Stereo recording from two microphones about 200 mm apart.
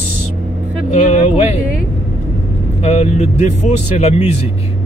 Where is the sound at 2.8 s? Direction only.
35° left (ahead or behind).